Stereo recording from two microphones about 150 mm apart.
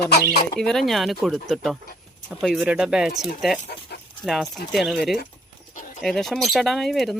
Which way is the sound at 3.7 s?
90° left.